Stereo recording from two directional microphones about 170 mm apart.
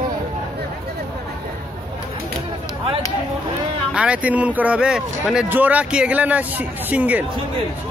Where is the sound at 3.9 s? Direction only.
5° right (ahead or behind).